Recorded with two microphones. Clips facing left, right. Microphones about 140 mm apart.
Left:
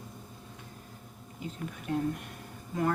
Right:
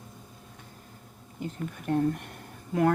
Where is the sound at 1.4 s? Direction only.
55° right (ahead or behind).